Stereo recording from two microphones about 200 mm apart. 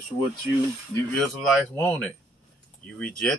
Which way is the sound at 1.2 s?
5° left (ahead or behind).